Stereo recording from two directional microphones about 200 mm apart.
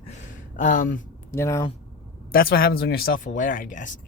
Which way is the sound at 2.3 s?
50° left (ahead or behind).